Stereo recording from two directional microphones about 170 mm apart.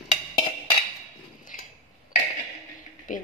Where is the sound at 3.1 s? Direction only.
50° left (ahead or behind).